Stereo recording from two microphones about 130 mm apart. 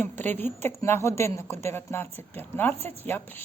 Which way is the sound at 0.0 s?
15° left (ahead or behind).